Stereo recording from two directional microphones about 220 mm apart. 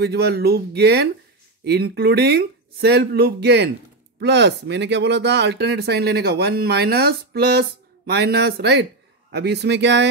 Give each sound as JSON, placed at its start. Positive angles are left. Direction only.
{"t": 0.0, "sound": "speech", "side_deg": -45}